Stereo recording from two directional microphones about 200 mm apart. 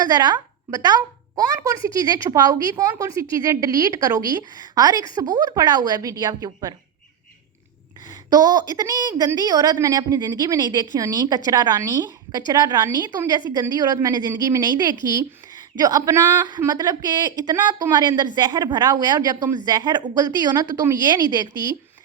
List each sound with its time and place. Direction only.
0.0 s a woman's voice: 20° right (ahead or behind)
8.3 s a woman's voice: 20° right (ahead or behind)